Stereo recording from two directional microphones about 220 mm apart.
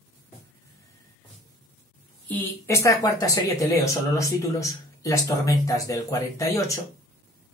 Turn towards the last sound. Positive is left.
turn(degrees=15)  # may be behind; listen again after turning